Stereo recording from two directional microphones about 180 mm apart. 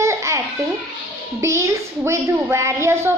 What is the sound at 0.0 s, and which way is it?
Babbling, 15° right (ahead or behind).